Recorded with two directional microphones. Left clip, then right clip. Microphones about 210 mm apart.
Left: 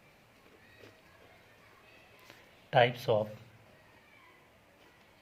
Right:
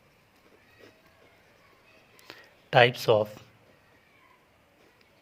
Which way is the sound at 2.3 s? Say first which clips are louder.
Right 5 dB; 45° right (ahead or behind).